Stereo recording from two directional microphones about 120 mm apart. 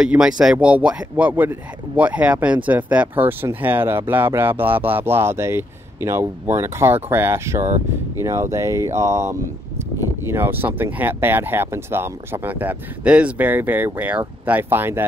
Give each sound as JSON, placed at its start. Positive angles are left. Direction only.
{"t": 0.0, "sound": "speech", "side_deg": -5}